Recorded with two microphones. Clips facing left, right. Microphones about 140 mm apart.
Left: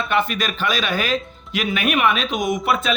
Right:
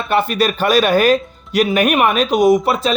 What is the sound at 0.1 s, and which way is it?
Speech, 35° right (ahead or behind).